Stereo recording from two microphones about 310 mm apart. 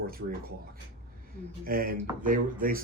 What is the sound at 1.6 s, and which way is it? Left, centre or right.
Speech, right.